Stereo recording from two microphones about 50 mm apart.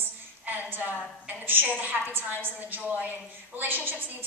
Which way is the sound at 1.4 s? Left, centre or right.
Right.